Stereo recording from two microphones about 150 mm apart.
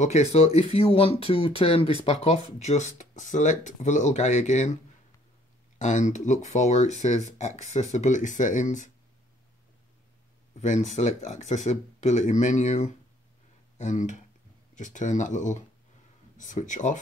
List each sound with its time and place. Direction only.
0.0 s speech: 45° left (ahead or behind)
5.8 s speech: 55° left (ahead or behind)
10.6 s speech: 50° left (ahead or behind)